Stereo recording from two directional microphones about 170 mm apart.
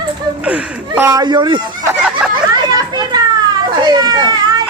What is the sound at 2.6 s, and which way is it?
Children playing, 25° right (ahead or behind).